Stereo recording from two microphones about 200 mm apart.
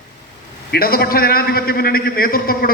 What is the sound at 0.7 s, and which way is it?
A man's voice, 50° left (ahead or behind).